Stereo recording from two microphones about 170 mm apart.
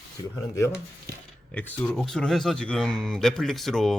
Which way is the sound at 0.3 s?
15° left (ahead or behind).